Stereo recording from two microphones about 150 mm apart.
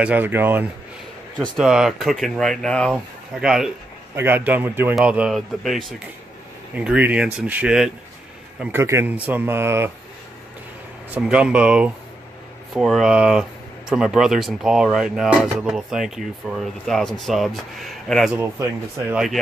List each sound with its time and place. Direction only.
0.0 s speech: 10° right (ahead or behind)
4.1 s speech: 15° right (ahead or behind)
8.7 s speech: 15° right (ahead or behind)
11.1 s speech: 5° right (ahead or behind)
18.4 s speech: 15° right (ahead or behind)